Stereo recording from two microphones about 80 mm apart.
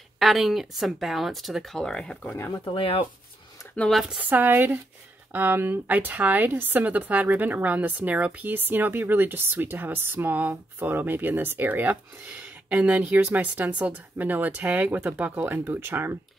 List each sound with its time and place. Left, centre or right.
0.2 s speech: centre
2.3 s speech: left
3.9 s speech: centre
4.2 s speech: right